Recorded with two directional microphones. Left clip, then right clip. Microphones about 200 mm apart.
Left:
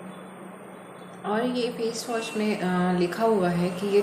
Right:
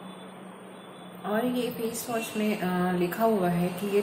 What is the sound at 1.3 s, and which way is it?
Speech, centre (ahead or behind).